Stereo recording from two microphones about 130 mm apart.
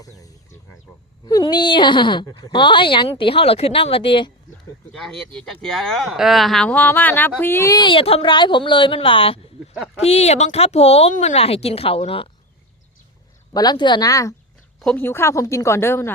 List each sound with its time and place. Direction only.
1.2 s speech: 30° left (ahead or behind)
4.9 s speech: centre (ahead or behind); by 7.8 s 20° left (ahead or behind)
7.8 s speech: 40° left (ahead or behind)
9.7 s speech: 5° right (ahead or behind)
10.0 s speech: 55° left (ahead or behind)
13.5 s speech: 30° left (ahead or behind)
14.8 s speech: 5° left (ahead or behind)
15.0 s speech: 20° left (ahead or behind)